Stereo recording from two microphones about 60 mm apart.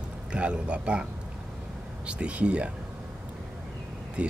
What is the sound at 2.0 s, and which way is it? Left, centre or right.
Speech, centre.